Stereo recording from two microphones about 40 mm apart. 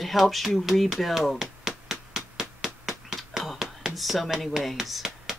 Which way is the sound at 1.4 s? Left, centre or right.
Centre.